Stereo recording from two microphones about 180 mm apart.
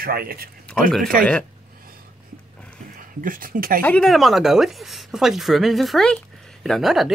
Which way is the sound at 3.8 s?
5° left (ahead or behind).